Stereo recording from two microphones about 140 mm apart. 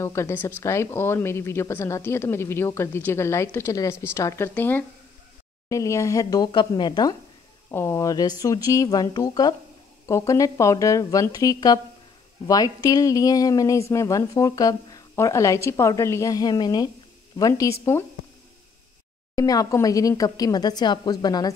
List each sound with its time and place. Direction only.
0.0 s a woman's voice: 20° left (ahead or behind)
19.3 s a woman's voice: 25° left (ahead or behind)